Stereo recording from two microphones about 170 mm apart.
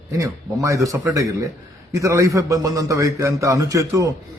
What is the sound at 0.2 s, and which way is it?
A man's voice, 20° right (ahead or behind).